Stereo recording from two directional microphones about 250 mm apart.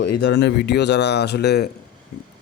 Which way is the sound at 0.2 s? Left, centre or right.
Left.